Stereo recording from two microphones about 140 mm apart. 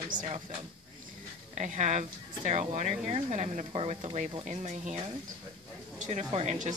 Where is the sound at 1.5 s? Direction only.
55° right (ahead or behind).